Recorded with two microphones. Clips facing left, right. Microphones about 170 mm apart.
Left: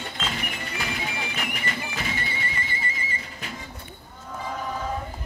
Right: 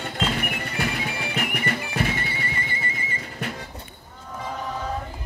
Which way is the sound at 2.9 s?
60° right (ahead or behind).